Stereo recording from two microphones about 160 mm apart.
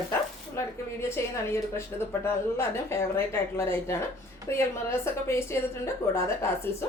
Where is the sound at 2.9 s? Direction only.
15° left (ahead or behind).